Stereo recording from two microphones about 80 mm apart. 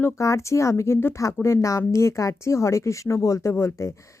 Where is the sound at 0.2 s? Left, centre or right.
Left.